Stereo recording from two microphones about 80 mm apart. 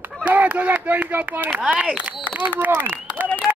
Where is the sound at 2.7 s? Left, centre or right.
Right.